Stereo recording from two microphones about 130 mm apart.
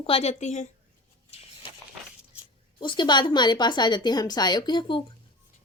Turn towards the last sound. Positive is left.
turn(degrees=40)  # may be behind; listen again after turning